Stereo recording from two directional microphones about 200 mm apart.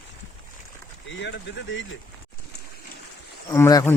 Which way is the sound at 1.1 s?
65° left (ahead or behind).